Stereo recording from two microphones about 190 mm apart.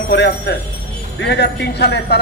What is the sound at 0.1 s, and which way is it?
Speech, 60° left (ahead or behind).